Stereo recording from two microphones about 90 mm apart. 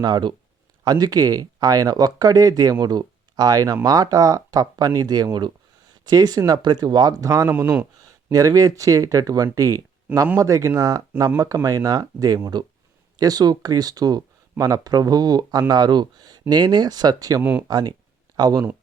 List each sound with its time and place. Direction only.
0.0 s speech: 55° right (ahead or behind); by 7.5 s 40° right (ahead or behind)
7.5 s speech: 25° right (ahead or behind)
8.0 s speech: 40° right (ahead or behind)
17.4 s speech: 15° right (ahead or behind)
17.7 s speech: 45° right (ahead or behind)